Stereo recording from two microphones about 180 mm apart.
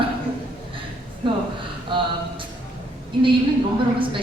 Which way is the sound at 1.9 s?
25° right (ahead or behind).